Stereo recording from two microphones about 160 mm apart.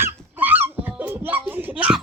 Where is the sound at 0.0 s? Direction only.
10° right (ahead or behind).